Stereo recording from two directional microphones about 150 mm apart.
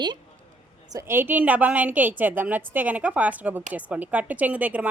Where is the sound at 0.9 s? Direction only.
20° right (ahead or behind).